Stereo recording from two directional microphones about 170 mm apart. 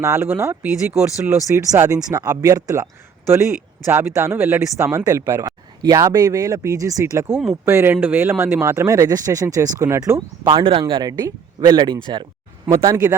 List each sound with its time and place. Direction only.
0.0 s speech: 15° right (ahead or behind)